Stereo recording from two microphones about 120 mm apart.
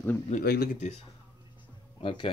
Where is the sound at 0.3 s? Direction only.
90° left.